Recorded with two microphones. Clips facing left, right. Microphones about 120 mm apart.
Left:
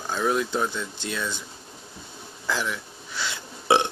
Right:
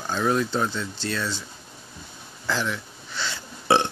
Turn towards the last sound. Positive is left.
turn(degrees=15)  # may be behind; listen again after turning